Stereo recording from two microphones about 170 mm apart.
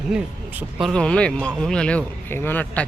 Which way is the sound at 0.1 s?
5° right (ahead or behind).